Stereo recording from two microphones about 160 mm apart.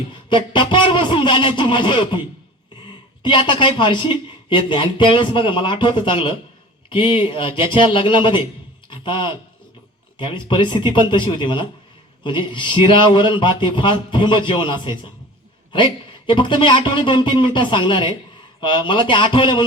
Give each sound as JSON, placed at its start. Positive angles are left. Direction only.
{"t": 0.1, "sound": "a man's voice", "side_deg": 30}
{"t": 8.9, "sound": "a sound", "side_deg": 30}
{"t": 10.2, "sound": "a man's voice", "side_deg": 30}